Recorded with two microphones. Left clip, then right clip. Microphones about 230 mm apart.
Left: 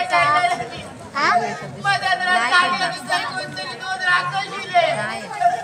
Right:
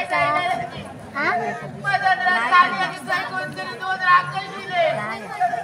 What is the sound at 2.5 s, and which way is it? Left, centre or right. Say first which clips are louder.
Chatter: right 1 dB; left.